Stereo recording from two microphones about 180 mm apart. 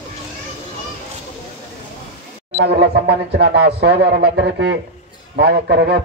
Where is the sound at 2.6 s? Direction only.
70° right (ahead or behind).